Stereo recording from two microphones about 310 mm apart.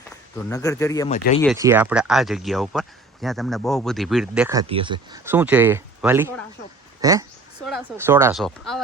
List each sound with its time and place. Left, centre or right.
0.4 s speech: centre
1.1 s speech: left
1.5 s speech: centre